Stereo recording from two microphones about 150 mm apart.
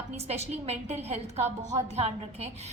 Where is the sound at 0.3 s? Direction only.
45° right (ahead or behind).